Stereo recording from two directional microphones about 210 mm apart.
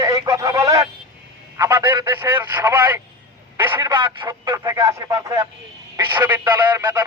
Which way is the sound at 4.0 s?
20° right (ahead or behind).